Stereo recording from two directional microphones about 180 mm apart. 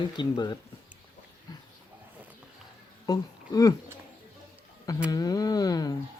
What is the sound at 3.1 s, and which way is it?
Speech, 20° left (ahead or behind).